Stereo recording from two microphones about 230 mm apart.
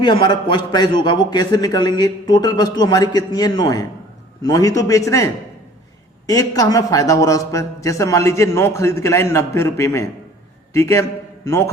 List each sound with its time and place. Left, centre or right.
0.0 s speech: centre